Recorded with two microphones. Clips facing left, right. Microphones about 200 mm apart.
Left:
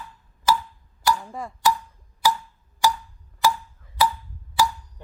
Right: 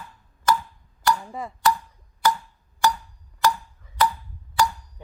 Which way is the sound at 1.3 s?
Centre (ahead or behind).